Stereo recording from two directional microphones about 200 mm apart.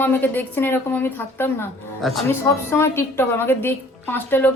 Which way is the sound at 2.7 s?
15° left (ahead or behind).